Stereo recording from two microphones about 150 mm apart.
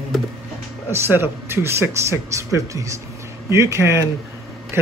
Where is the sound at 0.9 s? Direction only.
15° right (ahead or behind).